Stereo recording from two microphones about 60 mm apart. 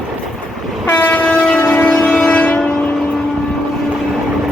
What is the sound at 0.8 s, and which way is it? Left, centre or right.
Train, left.